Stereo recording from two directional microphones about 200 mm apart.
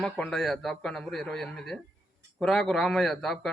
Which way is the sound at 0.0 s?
5° left (ahead or behind).